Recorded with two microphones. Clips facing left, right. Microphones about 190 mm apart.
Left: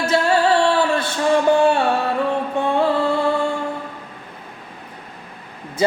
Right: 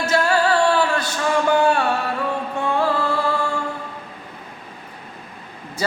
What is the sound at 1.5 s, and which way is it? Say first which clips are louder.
Music: left 1 dB; 25° left (ahead or behind).